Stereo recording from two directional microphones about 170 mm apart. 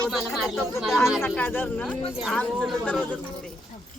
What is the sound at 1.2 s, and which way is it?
Speech, 10° left (ahead or behind).